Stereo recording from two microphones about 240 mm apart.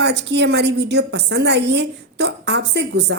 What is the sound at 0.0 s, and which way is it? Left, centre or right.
A woman's voice, right.